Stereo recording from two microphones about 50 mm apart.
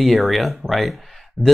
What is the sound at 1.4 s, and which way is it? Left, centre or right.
Speech, right.